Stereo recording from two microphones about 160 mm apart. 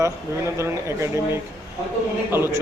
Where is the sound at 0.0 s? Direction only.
20° right (ahead or behind).